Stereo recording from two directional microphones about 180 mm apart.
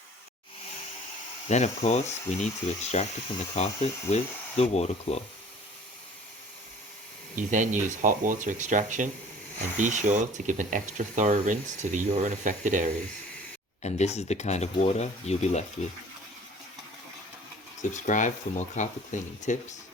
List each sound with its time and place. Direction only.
1.5 s speech: 40° left (ahead or behind)
7.3 s speech: 45° right (ahead or behind)
13.8 s speech: 35° left (ahead or behind)
18.0 s speech: 45° left (ahead or behind)